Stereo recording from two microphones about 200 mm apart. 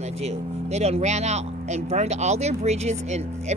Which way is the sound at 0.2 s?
30° right (ahead or behind).